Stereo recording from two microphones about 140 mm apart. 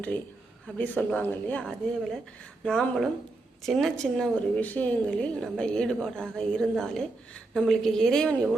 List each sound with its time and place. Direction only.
0.8 s a woman's voice: 10° left (ahead or behind)